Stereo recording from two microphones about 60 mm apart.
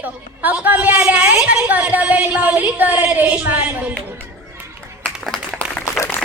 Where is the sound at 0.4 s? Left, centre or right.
Right.